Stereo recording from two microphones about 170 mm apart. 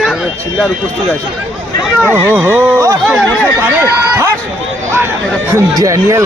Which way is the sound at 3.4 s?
10° right (ahead or behind).